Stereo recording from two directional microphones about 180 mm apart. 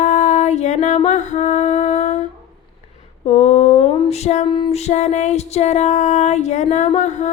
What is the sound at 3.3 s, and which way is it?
Female singing, 40° left (ahead or behind).